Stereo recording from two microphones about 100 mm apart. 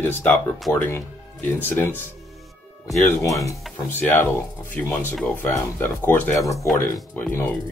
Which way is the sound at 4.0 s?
20° left (ahead or behind).